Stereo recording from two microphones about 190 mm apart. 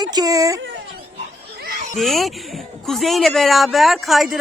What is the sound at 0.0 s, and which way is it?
Speech, 20° right (ahead or behind).